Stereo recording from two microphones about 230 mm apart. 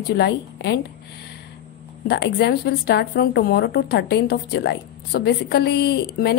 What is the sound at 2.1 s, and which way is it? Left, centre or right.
Speech, left.